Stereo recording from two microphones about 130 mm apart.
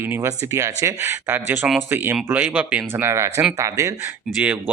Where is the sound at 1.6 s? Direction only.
Centre (ahead or behind).